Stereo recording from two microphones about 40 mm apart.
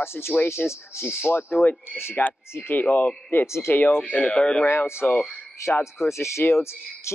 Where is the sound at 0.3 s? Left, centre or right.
Left.